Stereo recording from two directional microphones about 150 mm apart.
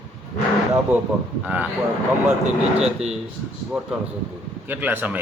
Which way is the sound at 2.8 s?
45° right (ahead or behind).